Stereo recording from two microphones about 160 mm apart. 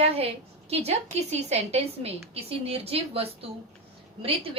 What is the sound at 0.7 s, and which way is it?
A woman's voice, 40° right (ahead or behind).